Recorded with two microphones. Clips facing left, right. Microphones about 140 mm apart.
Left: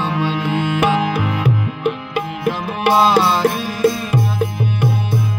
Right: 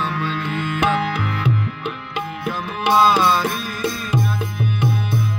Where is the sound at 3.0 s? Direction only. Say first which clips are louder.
Even; 25° left (ahead or behind).